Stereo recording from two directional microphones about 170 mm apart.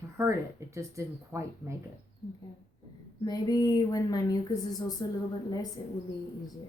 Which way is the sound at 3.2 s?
20° left (ahead or behind).